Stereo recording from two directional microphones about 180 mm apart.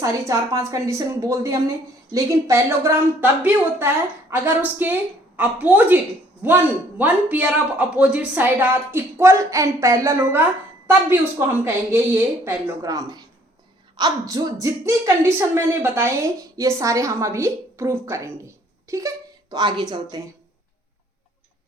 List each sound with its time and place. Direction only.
0.0 s a woman's voice: 15° right (ahead or behind)
7.0 s a woman's voice: 10° right (ahead or behind)